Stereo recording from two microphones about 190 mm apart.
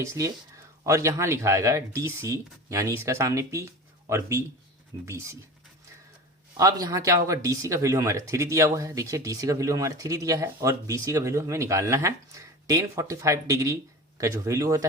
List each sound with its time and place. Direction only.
0.0 s speech: 15° right (ahead or behind)
6.6 s speech: 20° right (ahead or behind)